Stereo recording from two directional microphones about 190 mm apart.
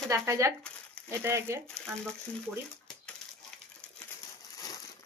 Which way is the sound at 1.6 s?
5° left (ahead or behind).